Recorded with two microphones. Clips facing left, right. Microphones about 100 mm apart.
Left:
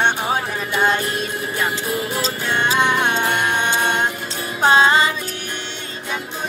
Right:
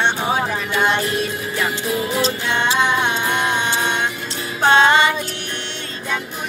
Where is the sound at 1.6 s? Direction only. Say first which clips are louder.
Right 2 dB; 40° left (ahead or behind).